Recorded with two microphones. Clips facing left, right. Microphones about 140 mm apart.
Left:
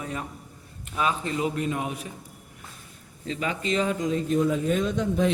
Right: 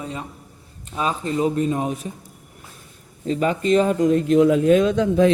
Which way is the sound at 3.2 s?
40° right (ahead or behind).